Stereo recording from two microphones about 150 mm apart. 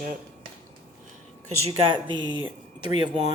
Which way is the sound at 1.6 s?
40° right (ahead or behind).